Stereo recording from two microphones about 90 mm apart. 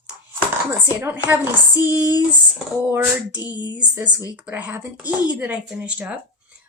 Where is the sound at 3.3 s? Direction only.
45° left (ahead or behind).